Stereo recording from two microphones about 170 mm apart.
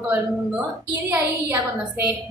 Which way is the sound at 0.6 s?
15° right (ahead or behind).